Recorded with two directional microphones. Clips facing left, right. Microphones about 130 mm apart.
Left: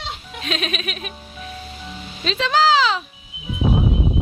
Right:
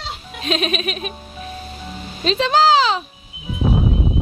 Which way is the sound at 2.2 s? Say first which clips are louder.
Right 3 dB; 35° right (ahead or behind).